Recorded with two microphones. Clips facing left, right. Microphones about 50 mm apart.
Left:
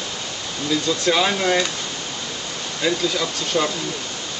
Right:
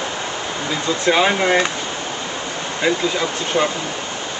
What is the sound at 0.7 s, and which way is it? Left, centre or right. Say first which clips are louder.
Speech: right 2 dB; right.